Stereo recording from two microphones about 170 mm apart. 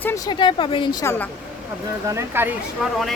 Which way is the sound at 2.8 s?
Centre (ahead or behind).